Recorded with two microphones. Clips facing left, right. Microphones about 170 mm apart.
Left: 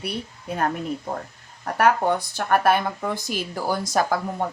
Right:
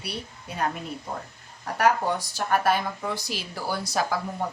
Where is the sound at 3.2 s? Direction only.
50° left (ahead or behind).